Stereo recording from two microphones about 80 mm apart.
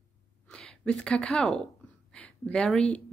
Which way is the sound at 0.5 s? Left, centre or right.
Centre.